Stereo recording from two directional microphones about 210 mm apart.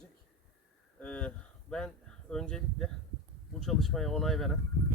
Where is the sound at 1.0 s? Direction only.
5° left (ahead or behind).